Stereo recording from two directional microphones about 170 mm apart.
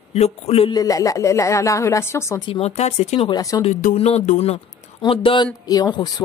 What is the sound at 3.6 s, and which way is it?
Speech, 45° left (ahead or behind).